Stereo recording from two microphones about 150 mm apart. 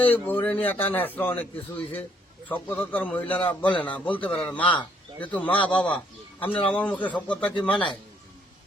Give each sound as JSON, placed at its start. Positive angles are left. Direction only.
{"t": 0.0, "sound": "a man's voice", "side_deg": 10}
{"t": 4.6, "sound": "a man's voice", "side_deg": 35}
{"t": 5.2, "sound": "a man's voice", "side_deg": 10}